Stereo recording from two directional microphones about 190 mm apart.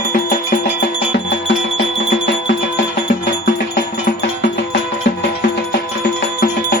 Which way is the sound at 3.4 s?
60° left (ahead or behind).